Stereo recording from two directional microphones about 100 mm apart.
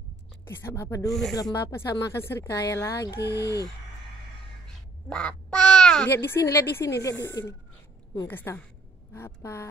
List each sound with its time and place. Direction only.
0.5 s speech: 25° left (ahead or behind)
1.0 s speech: centre (ahead or behind)
1.3 s speech: 35° left (ahead or behind)
4.6 s quack: 10° left (ahead or behind)
6.0 s speech: 25° left (ahead or behind)